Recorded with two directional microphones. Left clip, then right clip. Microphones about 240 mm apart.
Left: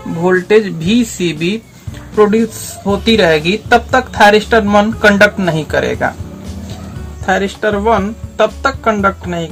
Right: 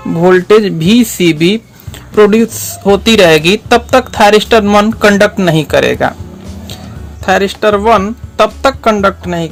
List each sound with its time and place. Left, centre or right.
0.3 s speech: right
7.3 s speech: right